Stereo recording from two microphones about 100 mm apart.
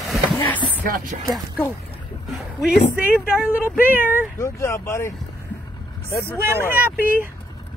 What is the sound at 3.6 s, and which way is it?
Speech, 20° right (ahead or behind).